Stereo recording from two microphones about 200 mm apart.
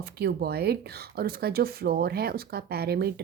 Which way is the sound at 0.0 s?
50° right (ahead or behind).